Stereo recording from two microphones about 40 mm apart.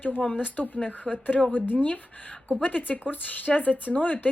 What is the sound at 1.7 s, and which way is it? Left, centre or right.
Speech, left.